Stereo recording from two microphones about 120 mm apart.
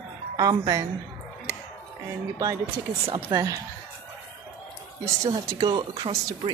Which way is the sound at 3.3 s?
30° right (ahead or behind).